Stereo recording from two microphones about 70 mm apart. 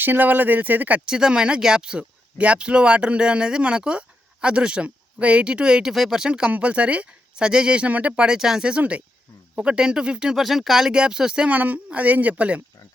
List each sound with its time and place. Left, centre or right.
0.0 s speech: right
10.3 s speech: centre
11.5 s speech: right